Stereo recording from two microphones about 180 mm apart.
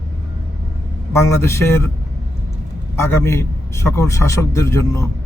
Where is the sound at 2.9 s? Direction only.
15° left (ahead or behind).